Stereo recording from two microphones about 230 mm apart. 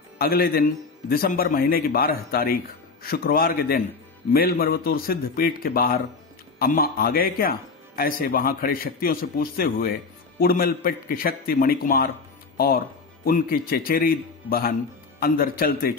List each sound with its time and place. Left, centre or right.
0.2 s a man's voice: left